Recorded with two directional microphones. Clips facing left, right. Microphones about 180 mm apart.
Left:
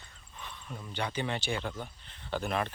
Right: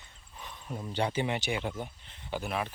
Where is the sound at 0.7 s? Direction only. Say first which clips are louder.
Right 5 dB; 30° right (ahead or behind).